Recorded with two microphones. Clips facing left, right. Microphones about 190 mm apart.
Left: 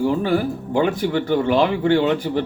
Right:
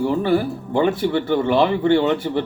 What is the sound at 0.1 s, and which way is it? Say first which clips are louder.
Speech: right 1 dB; 10° left (ahead or behind).